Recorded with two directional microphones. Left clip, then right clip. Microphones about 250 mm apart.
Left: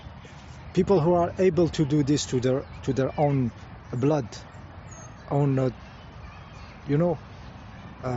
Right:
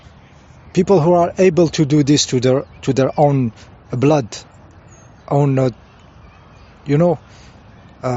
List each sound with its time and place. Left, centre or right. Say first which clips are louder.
0.7 s speech: right 9 dB; right
6.8 s speech: right 10 dB; right